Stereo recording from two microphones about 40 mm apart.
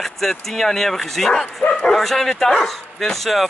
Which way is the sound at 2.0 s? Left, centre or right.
Centre.